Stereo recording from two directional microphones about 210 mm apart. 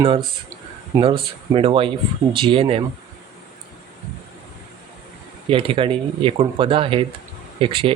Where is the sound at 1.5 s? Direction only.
25° right (ahead or behind).